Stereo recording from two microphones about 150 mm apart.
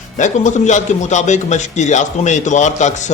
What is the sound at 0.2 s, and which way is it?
Speech, 55° left (ahead or behind).